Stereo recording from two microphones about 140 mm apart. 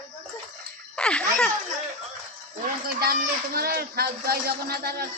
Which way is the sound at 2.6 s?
90° right.